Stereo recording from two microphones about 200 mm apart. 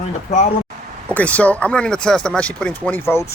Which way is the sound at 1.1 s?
5° left (ahead or behind).